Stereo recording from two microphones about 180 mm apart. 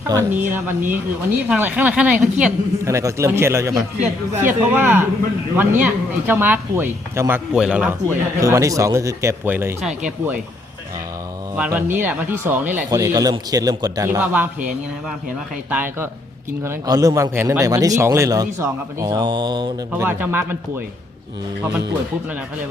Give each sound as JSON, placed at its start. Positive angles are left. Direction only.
{"t": 0.1, "sound": "speech", "side_deg": -15}
{"t": 11.5, "sound": "speech", "side_deg": -5}
{"t": 12.9, "sound": "a man's voice", "side_deg": -20}
{"t": 15.7, "sound": "a man's voice", "side_deg": -10}
{"t": 19.9, "sound": "speech", "side_deg": -10}